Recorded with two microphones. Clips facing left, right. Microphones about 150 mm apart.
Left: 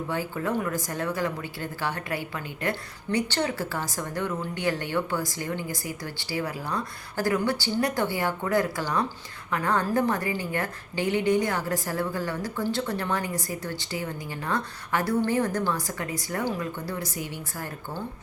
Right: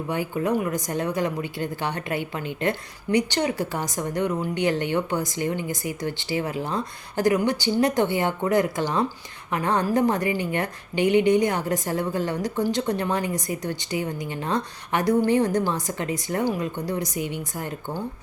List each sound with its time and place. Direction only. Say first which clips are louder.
0.1 s speech: right 5 dB; 15° right (ahead or behind)